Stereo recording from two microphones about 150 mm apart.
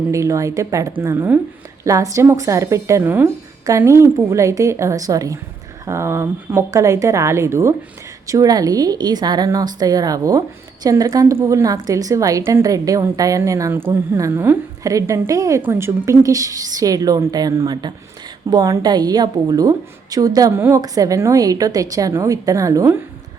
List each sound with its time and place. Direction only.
0.1 s a woman's voice: 20° right (ahead or behind)